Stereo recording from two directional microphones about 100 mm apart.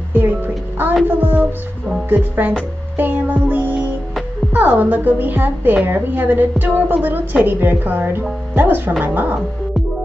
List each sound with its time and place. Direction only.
0.1 s music: 20° right (ahead or behind)
2.0 s a woman's voice: 20° right (ahead or behind)